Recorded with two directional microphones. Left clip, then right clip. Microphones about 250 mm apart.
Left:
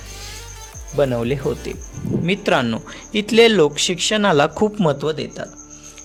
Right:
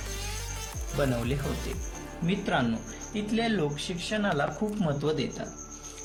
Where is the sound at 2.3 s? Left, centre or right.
Left.